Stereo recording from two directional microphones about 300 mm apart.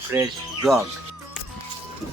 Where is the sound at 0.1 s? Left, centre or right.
Centre.